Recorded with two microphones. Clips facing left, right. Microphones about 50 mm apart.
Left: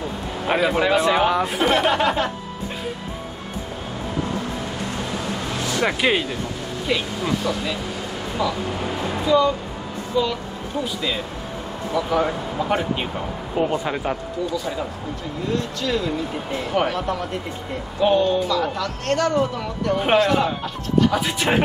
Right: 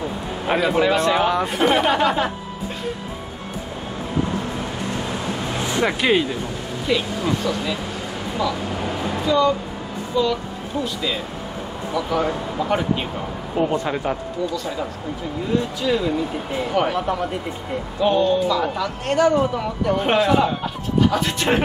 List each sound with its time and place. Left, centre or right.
0.5 s speech: centre
5.6 s music: right
5.9 s speech: centre
15.5 s speech: centre
18.0 s speech: centre
18.5 s speech: centre
21.1 s speech: centre